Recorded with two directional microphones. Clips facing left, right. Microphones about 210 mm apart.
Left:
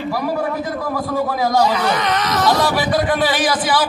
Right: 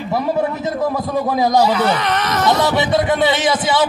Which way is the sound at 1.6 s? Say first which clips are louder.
Right 2 dB; 5° right (ahead or behind).